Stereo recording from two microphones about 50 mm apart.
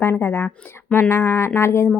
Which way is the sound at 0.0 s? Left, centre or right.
Left.